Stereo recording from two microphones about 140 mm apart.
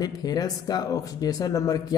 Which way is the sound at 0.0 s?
30° left (ahead or behind).